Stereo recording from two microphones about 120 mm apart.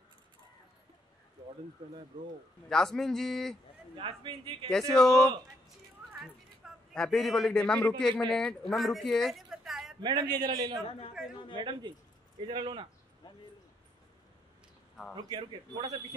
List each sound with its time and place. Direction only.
2.7 s a man's voice: 5° left (ahead or behind)
3.9 s a man's voice: 45° right (ahead or behind)
4.6 s a man's voice: 5° left (ahead or behind)
6.6 s a man's voice: 5° left (ahead or behind)
9.9 s a man's voice: 40° right (ahead or behind)
15.2 s a man's voice: 35° right (ahead or behind)